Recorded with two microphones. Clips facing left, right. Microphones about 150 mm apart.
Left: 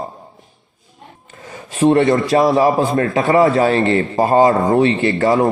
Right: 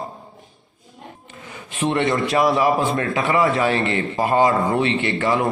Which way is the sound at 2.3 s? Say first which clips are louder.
Left 4 dB; 40° left (ahead or behind).